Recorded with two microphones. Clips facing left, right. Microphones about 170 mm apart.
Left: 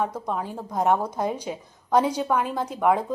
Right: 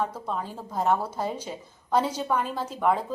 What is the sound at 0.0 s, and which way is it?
A woman's voice, 10° left (ahead or behind).